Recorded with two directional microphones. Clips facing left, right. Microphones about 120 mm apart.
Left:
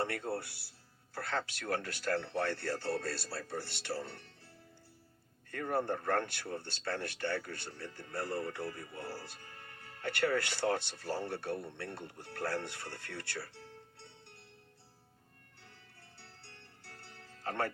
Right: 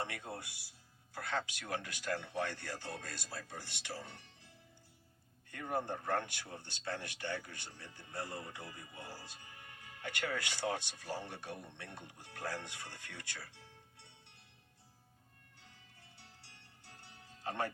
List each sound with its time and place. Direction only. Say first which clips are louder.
0.0 s speech: left 7 dB; 15° right (ahead or behind)
6.0 s speech: left 4 dB; 15° right (ahead or behind)
15.6 s music: left 4 dB; 15° right (ahead or behind)